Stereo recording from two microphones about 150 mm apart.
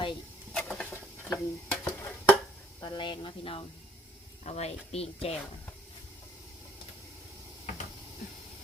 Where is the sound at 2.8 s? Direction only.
30° left (ahead or behind).